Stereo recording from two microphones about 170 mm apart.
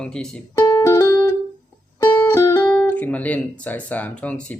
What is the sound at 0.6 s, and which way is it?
Music, 25° left (ahead or behind).